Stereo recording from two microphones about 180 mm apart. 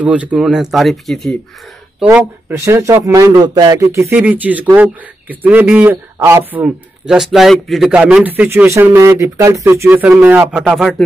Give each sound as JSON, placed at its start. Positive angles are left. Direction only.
{"t": 0.0, "sound": "speech", "side_deg": -10}
{"t": 2.0, "sound": "a man's voice", "side_deg": -15}